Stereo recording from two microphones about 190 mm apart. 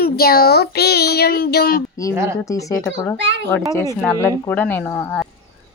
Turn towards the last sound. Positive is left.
turn(degrees=10)  # may be behind; listen again after turning